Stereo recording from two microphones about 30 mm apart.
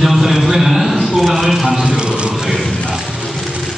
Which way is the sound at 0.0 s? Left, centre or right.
Centre.